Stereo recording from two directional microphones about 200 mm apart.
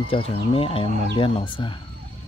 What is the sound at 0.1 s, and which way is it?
Speech, 30° left (ahead or behind).